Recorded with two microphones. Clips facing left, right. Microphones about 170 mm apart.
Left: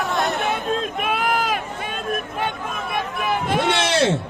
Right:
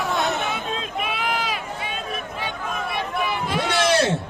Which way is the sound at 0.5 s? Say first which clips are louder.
Left 4 dB; 50° left (ahead or behind).